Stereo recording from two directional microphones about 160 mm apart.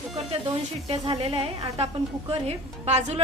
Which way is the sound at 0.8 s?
40° right (ahead or behind).